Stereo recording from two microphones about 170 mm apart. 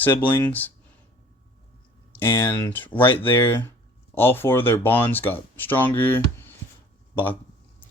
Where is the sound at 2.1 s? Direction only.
15° left (ahead or behind).